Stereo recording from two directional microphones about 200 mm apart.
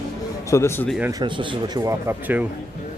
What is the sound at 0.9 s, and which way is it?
Speech, 5° right (ahead or behind).